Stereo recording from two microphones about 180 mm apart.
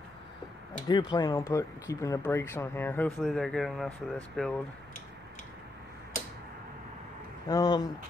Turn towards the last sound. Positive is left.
turn(degrees=20)  # may be behind; listen again after turning